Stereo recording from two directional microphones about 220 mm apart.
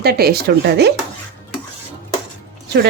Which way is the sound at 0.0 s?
45° right (ahead or behind).